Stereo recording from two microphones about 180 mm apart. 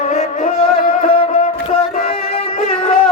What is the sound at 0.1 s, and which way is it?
Music, 40° left (ahead or behind).